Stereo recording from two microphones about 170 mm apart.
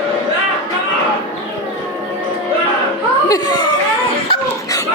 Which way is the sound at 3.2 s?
25° left (ahead or behind).